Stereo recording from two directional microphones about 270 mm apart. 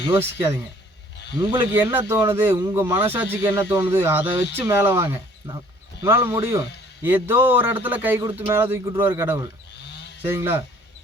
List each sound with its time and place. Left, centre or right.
0.1 s speech: centre
9.7 s a sound: left
10.2 s speech: centre